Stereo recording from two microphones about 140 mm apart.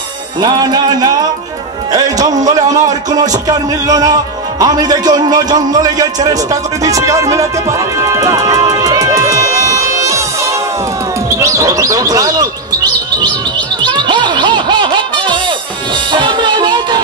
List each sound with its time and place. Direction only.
0.4 s music: 30° right (ahead or behind)
1.9 s speech: 25° right (ahead or behind)
8.0 s music: 25° right (ahead or behind)
11.2 s speech: 20° right (ahead or behind)
13.8 s music: 35° right (ahead or behind)